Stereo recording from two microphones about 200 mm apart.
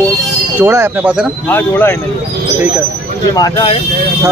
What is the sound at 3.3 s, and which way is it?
Speech, 20° left (ahead or behind).